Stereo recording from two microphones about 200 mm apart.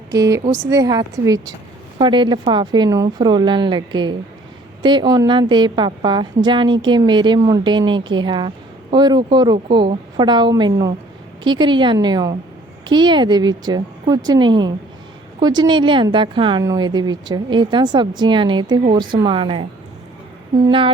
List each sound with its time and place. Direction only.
0.1 s a woman's voice: 15° right (ahead or behind)
20.7 s a woman's voice: 25° right (ahead or behind)